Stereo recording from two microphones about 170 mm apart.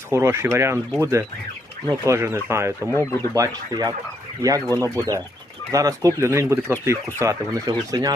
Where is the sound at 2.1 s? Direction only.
15° right (ahead or behind).